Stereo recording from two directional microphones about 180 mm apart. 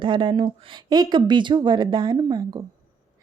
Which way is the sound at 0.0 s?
25° right (ahead or behind).